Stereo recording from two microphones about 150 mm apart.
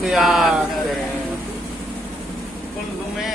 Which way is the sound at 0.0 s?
Centre (ahead or behind).